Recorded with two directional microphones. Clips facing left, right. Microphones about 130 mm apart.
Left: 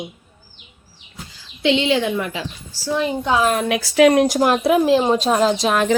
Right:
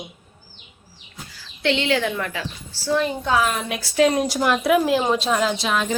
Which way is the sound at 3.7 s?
90° left.